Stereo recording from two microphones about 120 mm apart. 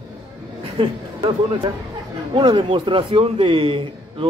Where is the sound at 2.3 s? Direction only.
40° right (ahead or behind).